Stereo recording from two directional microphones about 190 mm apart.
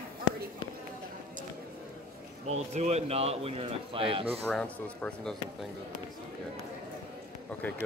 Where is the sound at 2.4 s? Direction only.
35° right (ahead or behind).